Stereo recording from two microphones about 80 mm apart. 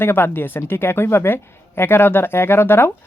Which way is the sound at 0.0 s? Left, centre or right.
Left.